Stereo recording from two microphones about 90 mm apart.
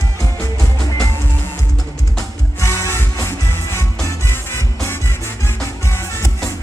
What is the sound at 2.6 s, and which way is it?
Music, 35° left (ahead or behind).